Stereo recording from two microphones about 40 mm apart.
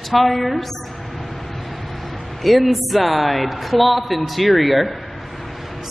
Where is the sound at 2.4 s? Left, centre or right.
Centre.